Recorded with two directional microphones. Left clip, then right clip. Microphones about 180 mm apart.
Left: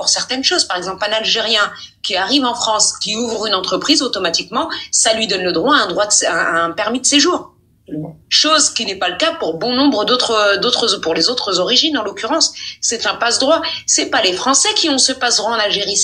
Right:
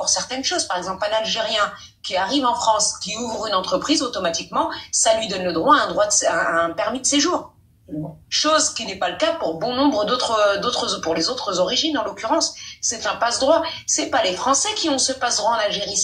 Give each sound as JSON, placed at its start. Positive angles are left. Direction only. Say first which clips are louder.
{"t": 0.0, "sound": "speech", "louder": "left 6 dB", "side_deg": 25}
{"t": 8.3, "sound": "speech", "louder": "left 6 dB", "side_deg": 25}